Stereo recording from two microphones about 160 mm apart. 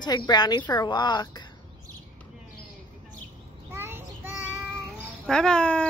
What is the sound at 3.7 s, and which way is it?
Child singing, 15° right (ahead or behind).